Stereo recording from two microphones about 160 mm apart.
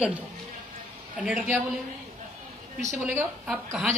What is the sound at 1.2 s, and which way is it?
Speech, 5° right (ahead or behind).